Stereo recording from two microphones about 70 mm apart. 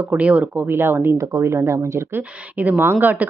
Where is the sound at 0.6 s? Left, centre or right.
Right.